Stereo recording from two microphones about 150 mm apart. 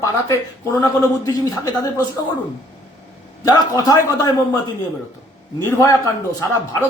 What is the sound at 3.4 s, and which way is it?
Speech, 25° left (ahead or behind).